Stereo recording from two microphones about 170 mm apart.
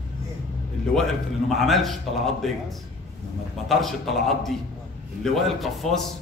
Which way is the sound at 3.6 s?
Centre (ahead or behind).